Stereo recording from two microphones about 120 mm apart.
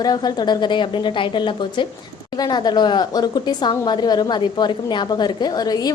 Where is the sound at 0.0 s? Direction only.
35° left (ahead or behind).